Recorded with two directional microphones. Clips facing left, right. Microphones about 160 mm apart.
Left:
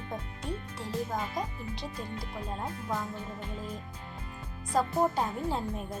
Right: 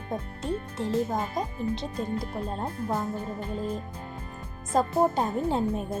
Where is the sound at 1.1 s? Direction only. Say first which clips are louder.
Right 4 dB; 45° right (ahead or behind).